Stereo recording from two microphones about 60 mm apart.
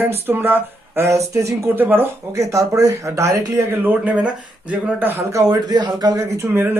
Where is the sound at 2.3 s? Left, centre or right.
Right.